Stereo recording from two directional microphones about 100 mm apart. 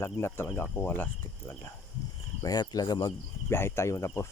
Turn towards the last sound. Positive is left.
turn(degrees=30)  # may be behind; listen again after turning